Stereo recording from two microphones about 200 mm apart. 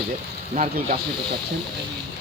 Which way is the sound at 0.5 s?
35° right (ahead or behind).